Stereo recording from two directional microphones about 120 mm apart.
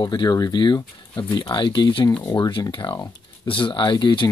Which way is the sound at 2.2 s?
30° left (ahead or behind).